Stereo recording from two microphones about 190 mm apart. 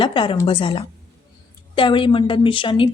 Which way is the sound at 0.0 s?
25° left (ahead or behind).